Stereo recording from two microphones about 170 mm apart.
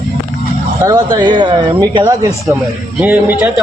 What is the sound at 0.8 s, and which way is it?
Speech, 25° right (ahead or behind).